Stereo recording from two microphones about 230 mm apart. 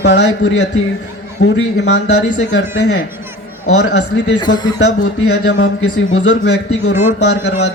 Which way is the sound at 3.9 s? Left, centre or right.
Left.